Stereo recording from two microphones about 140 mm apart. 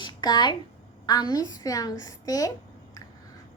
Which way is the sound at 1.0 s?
30° left (ahead or behind).